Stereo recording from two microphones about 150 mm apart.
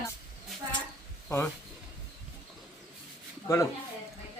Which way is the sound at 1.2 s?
20° left (ahead or behind).